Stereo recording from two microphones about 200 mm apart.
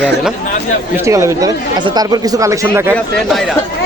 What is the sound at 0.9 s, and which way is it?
A man's voice, 15° right (ahead or behind).